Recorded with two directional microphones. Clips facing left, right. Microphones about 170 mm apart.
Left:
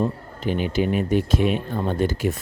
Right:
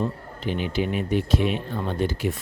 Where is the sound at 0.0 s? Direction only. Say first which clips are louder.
Left 3 dB; 45° left (ahead or behind).